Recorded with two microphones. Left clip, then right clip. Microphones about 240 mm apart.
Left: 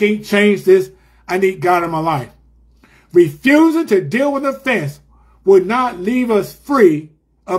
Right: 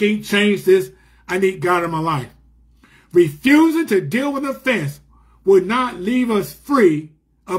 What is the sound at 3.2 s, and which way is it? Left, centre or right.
Speech, right.